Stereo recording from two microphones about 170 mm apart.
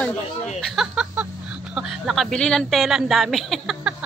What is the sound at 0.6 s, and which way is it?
A man's voice, 5° right (ahead or behind).